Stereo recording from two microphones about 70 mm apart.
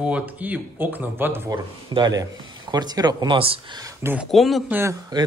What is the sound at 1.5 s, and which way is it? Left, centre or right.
Speech, right.